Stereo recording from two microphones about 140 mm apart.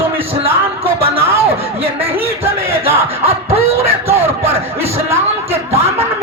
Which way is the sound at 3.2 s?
45° right (ahead or behind).